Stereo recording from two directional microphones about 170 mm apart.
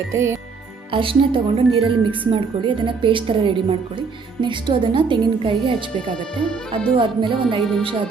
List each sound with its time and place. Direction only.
0.1 s music: 15° right (ahead or behind)
0.9 s a woman's voice: 30° right (ahead or behind)
6.9 s a woman's voice: 30° right (ahead or behind)